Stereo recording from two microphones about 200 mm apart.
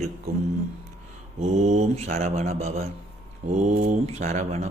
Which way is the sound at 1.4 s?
35° right (ahead or behind).